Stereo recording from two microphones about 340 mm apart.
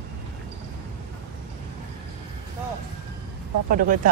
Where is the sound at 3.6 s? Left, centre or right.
Right.